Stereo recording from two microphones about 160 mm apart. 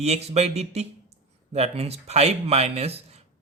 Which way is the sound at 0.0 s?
40° right (ahead or behind).